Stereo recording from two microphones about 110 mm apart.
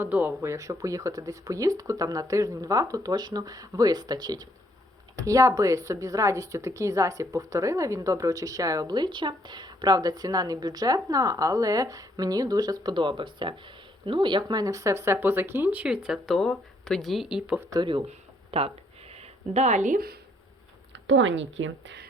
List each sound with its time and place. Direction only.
0.0 s speech: 15° right (ahead or behind)
17.7 s speech: 45° right (ahead or behind)
18.5 s a sound: 65° right (ahead or behind); by 19.8 s 90° right